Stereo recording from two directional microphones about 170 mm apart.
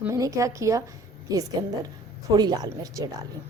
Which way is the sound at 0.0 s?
20° right (ahead or behind).